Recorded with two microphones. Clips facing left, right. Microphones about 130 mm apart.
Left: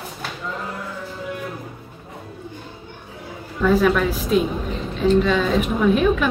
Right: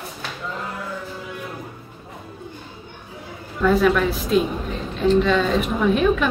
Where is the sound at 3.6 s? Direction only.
Centre (ahead or behind).